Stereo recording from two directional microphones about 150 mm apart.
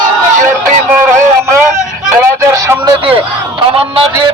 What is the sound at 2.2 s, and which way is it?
Music, 20° right (ahead or behind).